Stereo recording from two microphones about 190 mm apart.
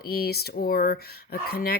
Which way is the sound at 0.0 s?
50° left (ahead or behind).